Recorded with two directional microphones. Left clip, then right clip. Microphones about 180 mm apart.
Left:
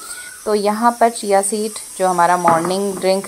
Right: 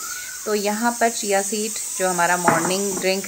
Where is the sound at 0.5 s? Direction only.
20° left (ahead or behind).